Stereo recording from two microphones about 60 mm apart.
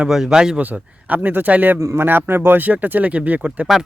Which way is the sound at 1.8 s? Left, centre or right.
Right.